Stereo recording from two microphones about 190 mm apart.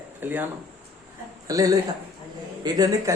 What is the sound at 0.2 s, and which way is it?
Speech, 10° right (ahead or behind).